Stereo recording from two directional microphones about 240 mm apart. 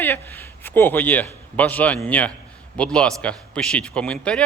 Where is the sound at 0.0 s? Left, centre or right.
Centre.